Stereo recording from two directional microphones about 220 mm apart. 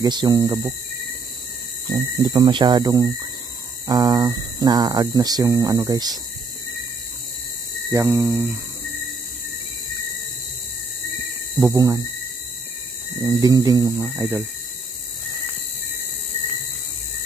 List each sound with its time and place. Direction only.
0.0 s hum: 20° right (ahead or behind)
1.9 s speech: 20° right (ahead or behind)
3.8 s hum: 15° right (ahead or behind)
7.9 s hum: 15° right (ahead or behind)
11.6 s hum: 15° right (ahead or behind)
13.4 s hum: 15° right (ahead or behind)